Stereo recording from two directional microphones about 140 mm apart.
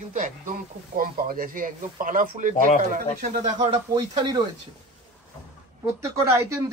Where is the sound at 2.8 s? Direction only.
60° right (ahead or behind).